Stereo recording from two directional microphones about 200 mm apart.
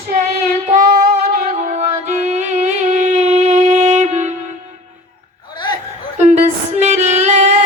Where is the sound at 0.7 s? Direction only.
45° right (ahead or behind).